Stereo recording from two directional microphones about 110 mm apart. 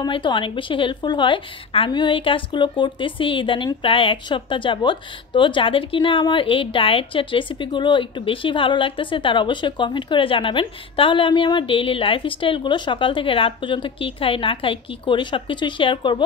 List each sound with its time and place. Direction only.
0.0 s speech: 45° left (ahead or behind)